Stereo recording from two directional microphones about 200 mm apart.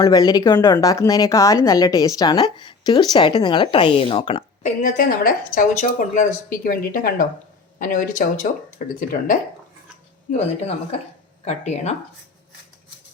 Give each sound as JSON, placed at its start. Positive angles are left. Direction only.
{"t": 0.0, "sound": "a woman's voice", "side_deg": 20}
{"t": 4.6, "sound": "a woman's voice", "side_deg": 40}
{"t": 11.4, "sound": "speech", "side_deg": 35}